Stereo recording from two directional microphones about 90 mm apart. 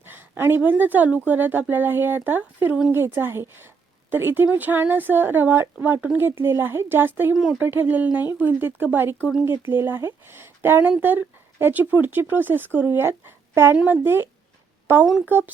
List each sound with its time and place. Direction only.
0.0 s speech: 25° right (ahead or behind)
15.0 s speech: 5° right (ahead or behind)
15.3 s speech: 20° right (ahead or behind)